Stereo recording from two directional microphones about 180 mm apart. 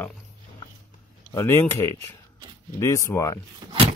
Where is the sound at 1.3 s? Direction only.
15° left (ahead or behind).